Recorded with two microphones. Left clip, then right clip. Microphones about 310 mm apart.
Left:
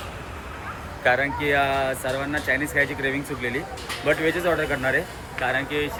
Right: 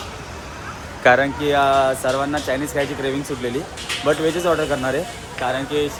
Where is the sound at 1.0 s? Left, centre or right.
Centre.